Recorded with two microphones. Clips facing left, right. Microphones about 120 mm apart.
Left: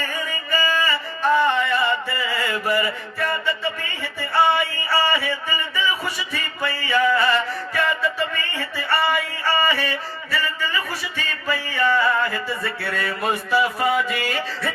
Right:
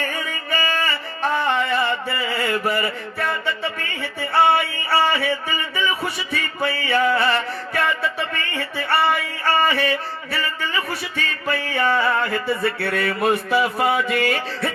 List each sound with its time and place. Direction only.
0.0 s music: 55° right (ahead or behind)
2.0 s mantra: 55° right (ahead or behind)
8.3 s music: 60° right (ahead or behind)